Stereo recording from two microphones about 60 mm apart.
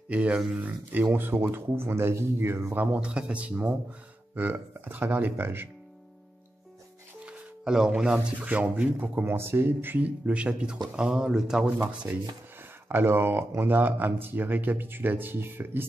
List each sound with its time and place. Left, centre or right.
0.1 s speech: right
0.6 s speech: right
2.7 s speech: right
3.0 s speech: centre; by 5.7 s right
7.2 s speech: centre
9.2 s speech: right; by 11.7 s centre
12.1 s speech: right
12.8 s speech: right